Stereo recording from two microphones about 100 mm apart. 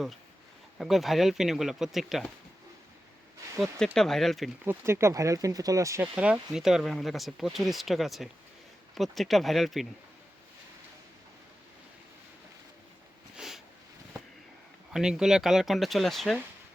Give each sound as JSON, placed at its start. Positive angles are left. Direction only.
{"t": 0.8, "sound": "speech", "side_deg": 0}
{"t": 3.9, "sound": "speech", "side_deg": 5}
{"t": 4.6, "sound": "speech", "side_deg": -25}
{"t": 6.1, "sound": "speech", "side_deg": -10}
{"t": 13.3, "sound": "a sound", "side_deg": -5}
{"t": 14.9, "sound": "speech", "side_deg": -5}